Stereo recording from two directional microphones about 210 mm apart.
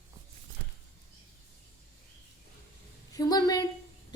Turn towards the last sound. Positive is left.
turn(degrees=20)  # may be behind; listen again after turning